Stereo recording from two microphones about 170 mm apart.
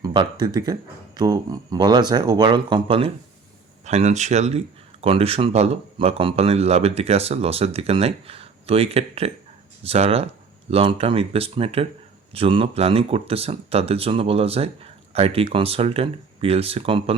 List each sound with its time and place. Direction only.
0.0 s speech: 25° right (ahead or behind)